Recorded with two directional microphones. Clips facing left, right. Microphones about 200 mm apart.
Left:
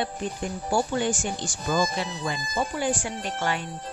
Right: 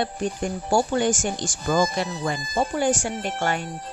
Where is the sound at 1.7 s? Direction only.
45° right (ahead or behind).